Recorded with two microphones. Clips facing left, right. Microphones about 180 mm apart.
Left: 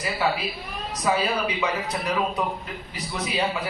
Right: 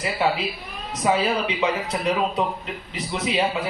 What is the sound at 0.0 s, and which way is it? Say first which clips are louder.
A man's voice: right 2 dB; 25° right (ahead or behind).